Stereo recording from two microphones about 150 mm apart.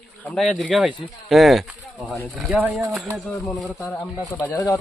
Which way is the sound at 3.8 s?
10° left (ahead or behind).